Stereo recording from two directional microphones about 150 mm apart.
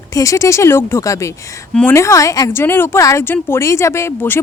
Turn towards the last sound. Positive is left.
turn(degrees=15)  # may be behind; listen again after turning